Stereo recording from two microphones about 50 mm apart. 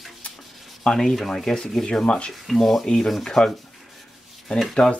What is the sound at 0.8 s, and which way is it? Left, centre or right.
Sanding, centre.